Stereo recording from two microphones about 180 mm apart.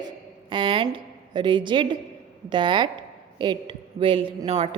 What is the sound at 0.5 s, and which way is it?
A woman's voice, 30° right (ahead or behind).